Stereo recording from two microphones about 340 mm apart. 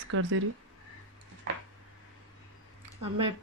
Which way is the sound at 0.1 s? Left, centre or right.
Right.